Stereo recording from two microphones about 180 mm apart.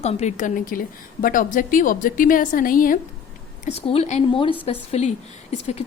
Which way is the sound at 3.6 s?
35° left (ahead or behind).